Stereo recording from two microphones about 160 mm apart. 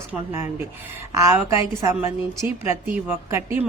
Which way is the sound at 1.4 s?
20° right (ahead or behind).